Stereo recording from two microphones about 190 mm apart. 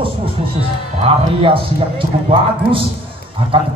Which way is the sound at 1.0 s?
30° right (ahead or behind).